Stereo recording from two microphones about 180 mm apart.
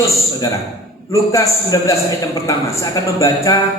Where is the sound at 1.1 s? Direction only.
20° left (ahead or behind).